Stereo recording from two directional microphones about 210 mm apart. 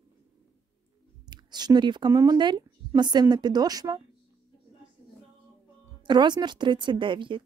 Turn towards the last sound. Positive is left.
turn(degrees=-25)  # may be behind; listen again after turning